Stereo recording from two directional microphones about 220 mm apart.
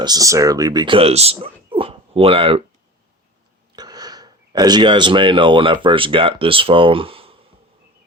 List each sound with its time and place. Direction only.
0.0 s speech: 15° right (ahead or behind)
3.8 s a sound: 20° right (ahead or behind)
5.8 s speech: 25° right (ahead or behind)